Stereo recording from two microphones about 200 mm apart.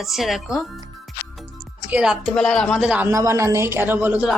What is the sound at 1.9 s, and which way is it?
A woman's voice, 5° right (ahead or behind).